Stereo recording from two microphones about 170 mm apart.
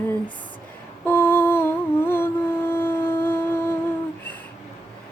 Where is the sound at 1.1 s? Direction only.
15° left (ahead or behind).